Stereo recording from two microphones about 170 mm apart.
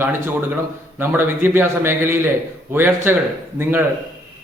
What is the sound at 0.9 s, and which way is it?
A man's voice, 15° right (ahead or behind).